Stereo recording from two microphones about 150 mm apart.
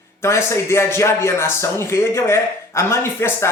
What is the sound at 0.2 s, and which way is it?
A man's voice, 20° left (ahead or behind).